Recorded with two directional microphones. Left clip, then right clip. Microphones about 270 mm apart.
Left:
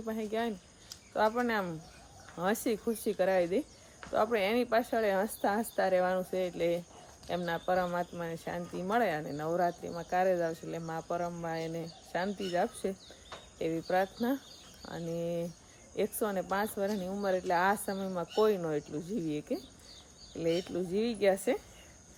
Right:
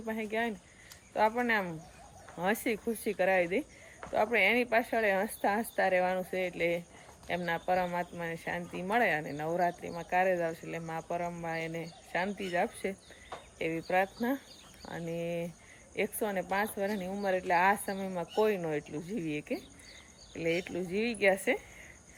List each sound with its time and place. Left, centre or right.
0.0 s speech: centre
4.0 s a sound: centre
4.4 s speech: centre